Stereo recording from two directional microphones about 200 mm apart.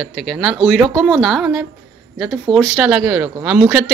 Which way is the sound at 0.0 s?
Centre (ahead or behind).